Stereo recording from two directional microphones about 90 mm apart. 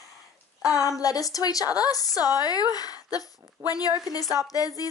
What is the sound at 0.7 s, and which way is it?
A woman's voice, 40° left (ahead or behind).